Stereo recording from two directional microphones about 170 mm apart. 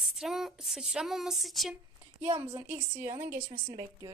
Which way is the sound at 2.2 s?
35° right (ahead or behind).